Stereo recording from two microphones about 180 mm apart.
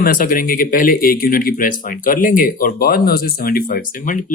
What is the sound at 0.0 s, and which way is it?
Speech, 55° left (ahead or behind).